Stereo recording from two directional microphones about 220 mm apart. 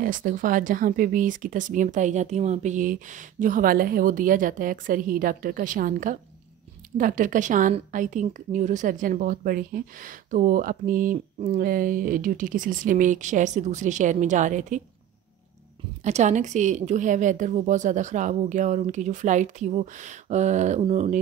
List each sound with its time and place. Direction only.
0.0 s a woman's voice: 40° right (ahead or behind)
16.0 s a woman's voice: 30° right (ahead or behind)